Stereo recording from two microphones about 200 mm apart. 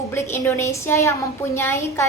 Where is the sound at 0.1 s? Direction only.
10° left (ahead or behind).